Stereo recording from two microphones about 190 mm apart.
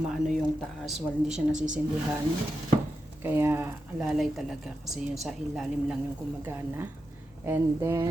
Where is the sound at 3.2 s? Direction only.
10° right (ahead or behind).